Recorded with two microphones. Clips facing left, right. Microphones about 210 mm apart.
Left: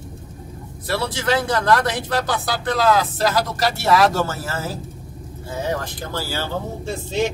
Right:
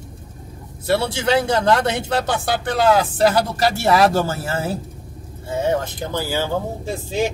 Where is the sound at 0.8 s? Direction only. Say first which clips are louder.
Right 3 dB; 25° right (ahead or behind); by 7.3 s 10° right (ahead or behind).